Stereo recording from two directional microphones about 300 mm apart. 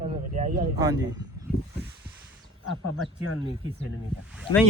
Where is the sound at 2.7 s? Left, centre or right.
Centre.